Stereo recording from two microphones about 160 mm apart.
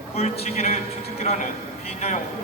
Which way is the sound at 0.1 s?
40° left (ahead or behind).